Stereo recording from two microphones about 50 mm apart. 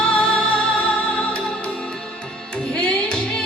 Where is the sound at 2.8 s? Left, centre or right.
Centre.